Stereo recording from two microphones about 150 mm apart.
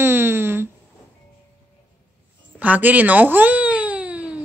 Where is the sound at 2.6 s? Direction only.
10° right (ahead or behind).